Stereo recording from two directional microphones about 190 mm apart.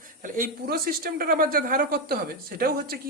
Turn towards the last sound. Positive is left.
turn(degrees=-55)  # may be behind; listen again after turning